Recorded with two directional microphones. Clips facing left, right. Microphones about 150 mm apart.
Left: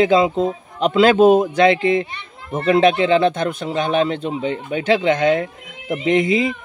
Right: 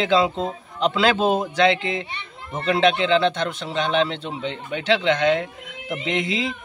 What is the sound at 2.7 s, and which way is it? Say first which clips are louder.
Speech: left 5 dB; 50° left (ahead or behind).